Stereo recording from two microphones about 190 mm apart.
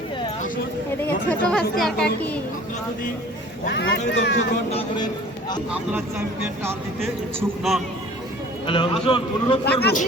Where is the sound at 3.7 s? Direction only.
65° left (ahead or behind).